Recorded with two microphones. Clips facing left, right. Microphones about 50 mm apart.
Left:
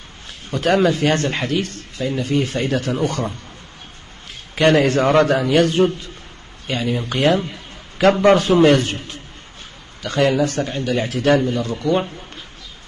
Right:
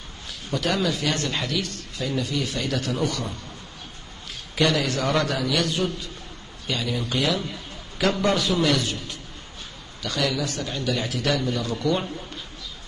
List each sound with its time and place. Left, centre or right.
0.5 s a man's voice: left
4.6 s a man's voice: left